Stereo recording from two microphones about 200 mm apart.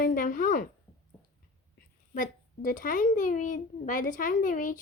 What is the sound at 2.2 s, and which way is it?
A child's voice, 45° left (ahead or behind).